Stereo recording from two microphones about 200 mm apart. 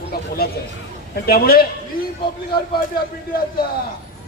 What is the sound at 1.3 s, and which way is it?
Speech, 50° left (ahead or behind).